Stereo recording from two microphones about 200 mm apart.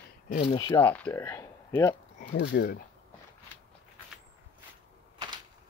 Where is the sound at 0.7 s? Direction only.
10° left (ahead or behind).